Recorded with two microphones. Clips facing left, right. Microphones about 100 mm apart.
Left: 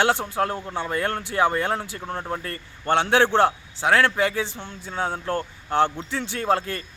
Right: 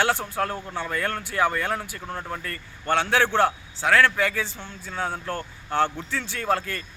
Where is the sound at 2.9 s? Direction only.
20° left (ahead or behind).